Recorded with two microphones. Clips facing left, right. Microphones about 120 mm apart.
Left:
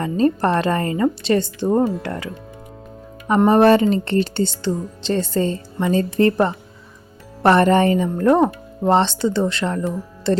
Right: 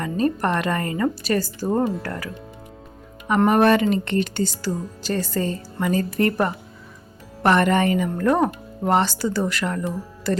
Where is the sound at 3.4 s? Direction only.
30° left (ahead or behind).